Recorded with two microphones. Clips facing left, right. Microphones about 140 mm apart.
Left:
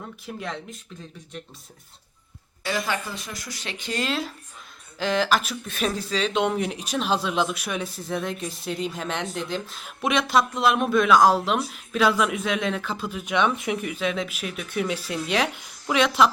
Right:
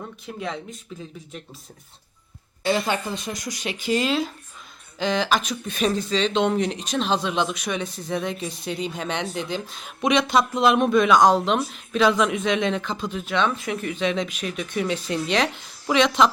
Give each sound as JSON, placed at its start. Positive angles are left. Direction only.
{"t": 0.3, "sound": "speech", "side_deg": 0}
{"t": 2.6, "sound": "speech", "side_deg": -25}